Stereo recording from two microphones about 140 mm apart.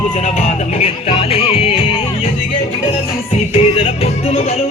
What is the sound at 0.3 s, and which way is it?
Music, 50° left (ahead or behind).